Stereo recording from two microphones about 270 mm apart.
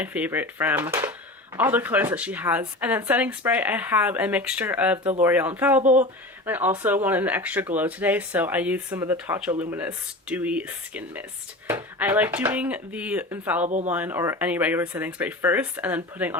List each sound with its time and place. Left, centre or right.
0.0 s speech: centre
13.7 s speech: right
13.9 s speech: centre